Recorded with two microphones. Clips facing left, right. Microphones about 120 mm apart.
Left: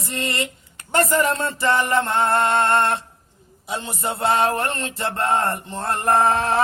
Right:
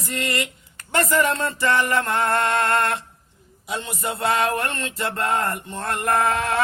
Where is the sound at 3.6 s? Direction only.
30° left (ahead or behind).